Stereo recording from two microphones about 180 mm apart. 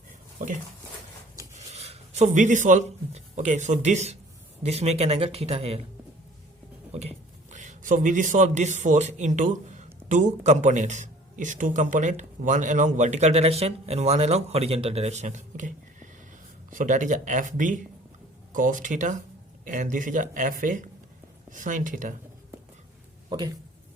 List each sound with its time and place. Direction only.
0.3 s a man's voice: 45° right (ahead or behind)
6.9 s a man's voice: 35° right (ahead or behind)